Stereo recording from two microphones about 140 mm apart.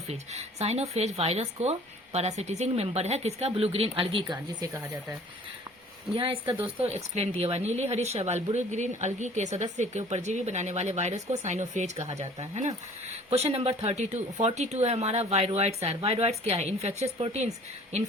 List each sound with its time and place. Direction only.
0.1 s a woman's voice: 50° right (ahead or behind)
4.6 s speech: 20° right (ahead or behind)
6.1 s a woman's voice: 40° right (ahead or behind)